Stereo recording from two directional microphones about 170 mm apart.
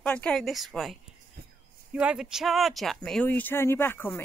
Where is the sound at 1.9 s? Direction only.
5° right (ahead or behind); by 4.1 s 15° left (ahead or behind).